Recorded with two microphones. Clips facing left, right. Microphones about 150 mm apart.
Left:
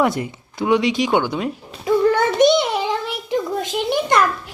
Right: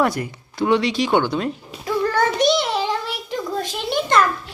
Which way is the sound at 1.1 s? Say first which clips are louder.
Even; 10° left (ahead or behind).